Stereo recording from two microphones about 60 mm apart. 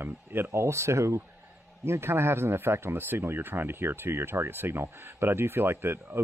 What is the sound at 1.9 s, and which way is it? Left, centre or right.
Speech, right.